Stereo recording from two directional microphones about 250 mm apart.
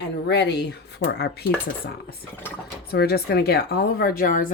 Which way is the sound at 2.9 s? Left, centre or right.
Left.